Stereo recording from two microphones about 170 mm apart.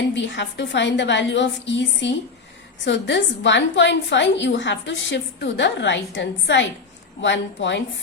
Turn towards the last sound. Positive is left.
turn(degrees=90)